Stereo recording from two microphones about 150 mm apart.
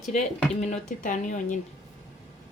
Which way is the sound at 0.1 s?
50° left (ahead or behind).